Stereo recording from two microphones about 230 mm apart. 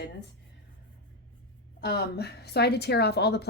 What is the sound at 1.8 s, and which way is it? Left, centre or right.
Speech, left.